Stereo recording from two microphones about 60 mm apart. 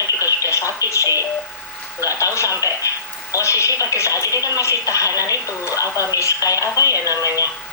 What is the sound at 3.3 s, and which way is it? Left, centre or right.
Speech, left.